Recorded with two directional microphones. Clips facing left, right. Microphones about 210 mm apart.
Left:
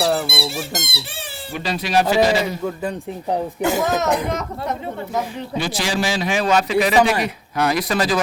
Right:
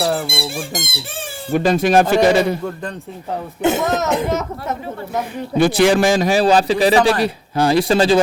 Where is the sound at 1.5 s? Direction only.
50° right (ahead or behind).